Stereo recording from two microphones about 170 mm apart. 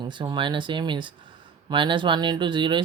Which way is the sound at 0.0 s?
25° right (ahead or behind).